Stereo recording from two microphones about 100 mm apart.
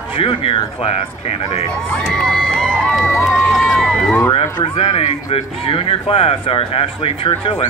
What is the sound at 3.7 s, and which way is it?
Run, 5° left (ahead or behind).